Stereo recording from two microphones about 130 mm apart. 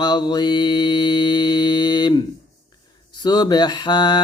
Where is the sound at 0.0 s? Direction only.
35° left (ahead or behind).